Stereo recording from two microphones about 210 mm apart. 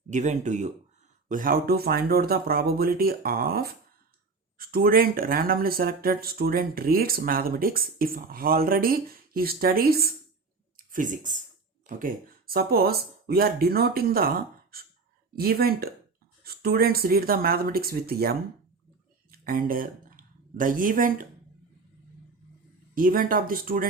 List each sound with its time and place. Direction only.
0.1 s speech: 35° right (ahead or behind)
23.0 s speech: 40° right (ahead or behind)